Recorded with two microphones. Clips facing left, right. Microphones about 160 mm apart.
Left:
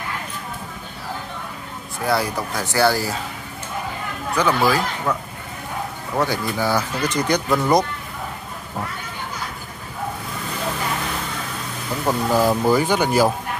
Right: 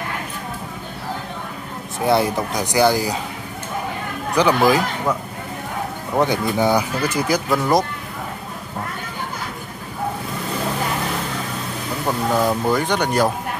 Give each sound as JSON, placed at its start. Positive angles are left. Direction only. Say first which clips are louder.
{"t": 2.0, "sound": "speech", "louder": "right 4 dB", "side_deg": -20}
{"t": 4.4, "sound": "speech", "louder": "right 3 dB", "side_deg": -15}
{"t": 6.1, "sound": "speech", "louder": "right 4 dB", "side_deg": -20}
{"t": 12.1, "sound": "speech", "louder": "left 1 dB", "side_deg": 5}